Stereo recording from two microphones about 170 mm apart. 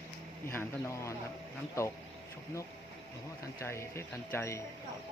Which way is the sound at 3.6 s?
15° left (ahead or behind).